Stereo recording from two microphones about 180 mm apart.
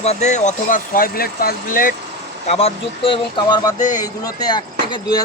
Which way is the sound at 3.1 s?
25° left (ahead or behind).